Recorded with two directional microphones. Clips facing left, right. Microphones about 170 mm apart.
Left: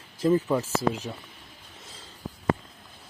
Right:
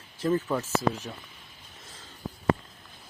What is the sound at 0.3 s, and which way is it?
Speech, 10° left (ahead or behind).